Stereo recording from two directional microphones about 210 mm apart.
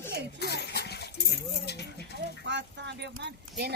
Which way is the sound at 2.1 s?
50° right (ahead or behind).